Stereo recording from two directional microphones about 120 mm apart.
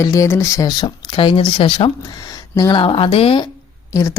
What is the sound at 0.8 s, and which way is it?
Speech, 40° left (ahead or behind).